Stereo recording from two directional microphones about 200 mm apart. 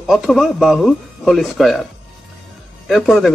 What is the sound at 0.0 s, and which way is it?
Speech, centre (ahead or behind).